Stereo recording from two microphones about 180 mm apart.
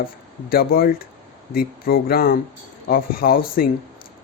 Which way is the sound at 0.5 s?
55° left (ahead or behind).